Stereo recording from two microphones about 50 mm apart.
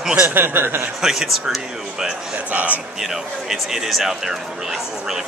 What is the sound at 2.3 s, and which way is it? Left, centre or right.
Speech, right.